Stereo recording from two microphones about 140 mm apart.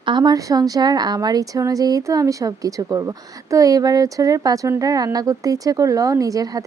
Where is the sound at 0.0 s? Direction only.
30° right (ahead or behind).